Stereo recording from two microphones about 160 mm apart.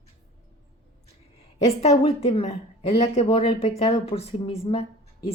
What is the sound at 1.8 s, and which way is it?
A woman's voice, 40° left (ahead or behind).